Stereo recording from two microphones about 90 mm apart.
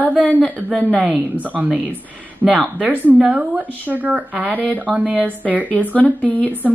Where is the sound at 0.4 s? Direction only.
5° left (ahead or behind).